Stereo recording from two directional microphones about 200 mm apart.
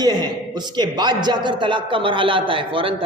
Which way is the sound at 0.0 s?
20° right (ahead or behind).